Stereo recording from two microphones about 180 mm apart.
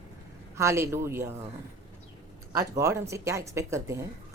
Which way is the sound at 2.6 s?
15° right (ahead or behind).